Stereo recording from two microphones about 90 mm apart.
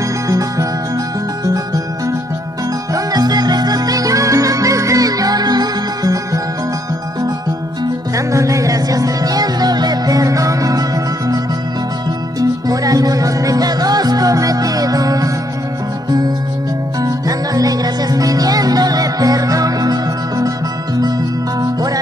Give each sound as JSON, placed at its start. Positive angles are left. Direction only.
{"t": 0.3, "sound": "music", "side_deg": -40}
{"t": 2.9, "sound": "music", "side_deg": -45}
{"t": 8.3, "sound": "music", "side_deg": -35}
{"t": 17.0, "sound": "music", "side_deg": -40}
{"t": 21.5, "sound": "music", "side_deg": -45}